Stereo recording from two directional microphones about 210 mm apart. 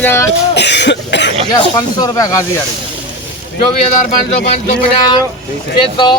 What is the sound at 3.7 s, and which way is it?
Speech, 35° left (ahead or behind).